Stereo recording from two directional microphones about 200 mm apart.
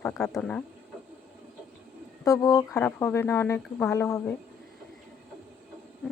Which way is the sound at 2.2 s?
15° left (ahead or behind).